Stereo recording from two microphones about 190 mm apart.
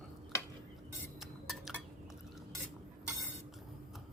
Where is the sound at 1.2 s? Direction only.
Centre (ahead or behind).